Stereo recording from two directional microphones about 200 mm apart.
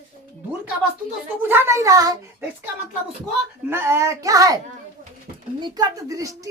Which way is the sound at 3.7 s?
10° right (ahead or behind).